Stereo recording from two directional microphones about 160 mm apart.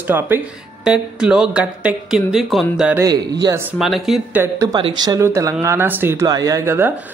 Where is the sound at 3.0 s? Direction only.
25° right (ahead or behind).